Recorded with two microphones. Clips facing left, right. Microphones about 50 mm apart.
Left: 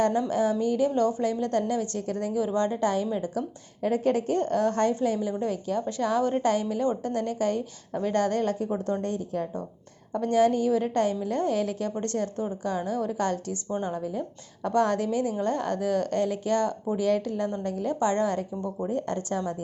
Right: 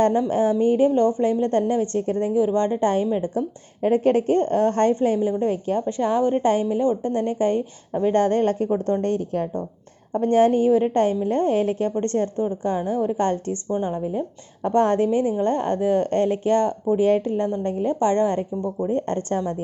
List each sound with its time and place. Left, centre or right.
0.0 s a woman's voice: right